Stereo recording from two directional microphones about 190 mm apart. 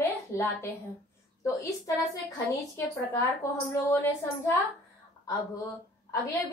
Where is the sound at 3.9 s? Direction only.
15° left (ahead or behind).